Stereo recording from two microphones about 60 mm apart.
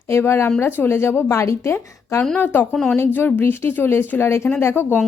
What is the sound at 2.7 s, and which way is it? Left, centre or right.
Speech, centre.